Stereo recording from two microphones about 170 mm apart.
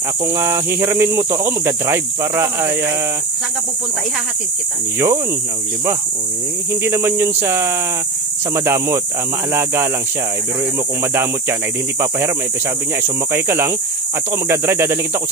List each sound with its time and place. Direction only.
0.3 s speech: 15° right (ahead or behind)
4.9 s speech: 15° right (ahead or behind)
6.8 s speech: 15° right (ahead or behind)
13.3 s speech: 15° right (ahead or behind)